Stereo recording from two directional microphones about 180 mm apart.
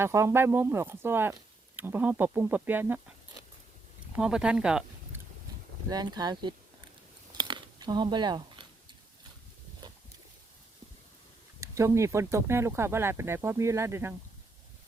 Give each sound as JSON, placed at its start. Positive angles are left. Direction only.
{"t": 0.0, "sound": "speech", "side_deg": -15}
{"t": 4.1, "sound": "speech", "side_deg": -5}
{"t": 5.9, "sound": "speech", "side_deg": -20}
{"t": 7.3, "sound": "a sound", "side_deg": -25}
{"t": 11.6, "sound": "speech", "side_deg": -15}